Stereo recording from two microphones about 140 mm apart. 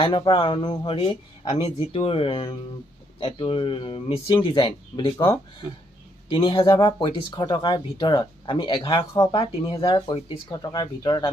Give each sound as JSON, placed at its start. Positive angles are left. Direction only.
{"t": 0.0, "sound": "speech", "side_deg": 35}